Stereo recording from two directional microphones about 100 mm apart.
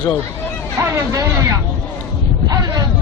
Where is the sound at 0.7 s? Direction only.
35° right (ahead or behind).